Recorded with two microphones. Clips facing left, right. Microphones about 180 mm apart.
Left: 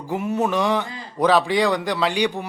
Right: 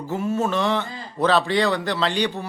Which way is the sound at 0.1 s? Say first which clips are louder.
Left 1 dB; 20° left (ahead or behind).